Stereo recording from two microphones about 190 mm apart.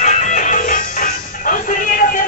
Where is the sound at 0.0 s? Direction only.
40° left (ahead or behind).